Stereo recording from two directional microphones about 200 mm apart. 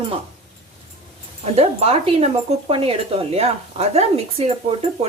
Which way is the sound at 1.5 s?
30° right (ahead or behind).